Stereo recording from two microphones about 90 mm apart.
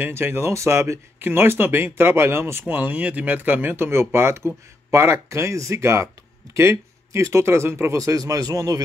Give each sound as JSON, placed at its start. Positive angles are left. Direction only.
{"t": 0.0, "sound": "speech", "side_deg": -25}